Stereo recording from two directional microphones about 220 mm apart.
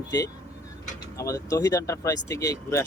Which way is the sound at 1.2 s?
15° left (ahead or behind).